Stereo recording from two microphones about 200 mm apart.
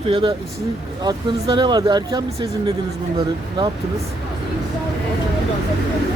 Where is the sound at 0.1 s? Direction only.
25° right (ahead or behind).